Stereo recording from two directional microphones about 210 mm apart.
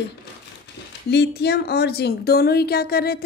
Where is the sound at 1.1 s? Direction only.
50° left (ahead or behind).